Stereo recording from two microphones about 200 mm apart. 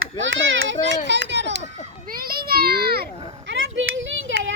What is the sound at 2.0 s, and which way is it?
Children playing, 45° right (ahead or behind).